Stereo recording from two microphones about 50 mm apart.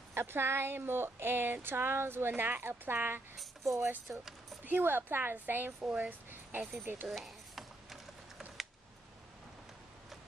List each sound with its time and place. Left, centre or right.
0.1 s speech: right
3.6 s speech: right
4.1 s speech: centre
4.6 s a woman's voice: right
5.9 s a sound: right
6.8 s a woman's voice: right
7.1 s a sound: centre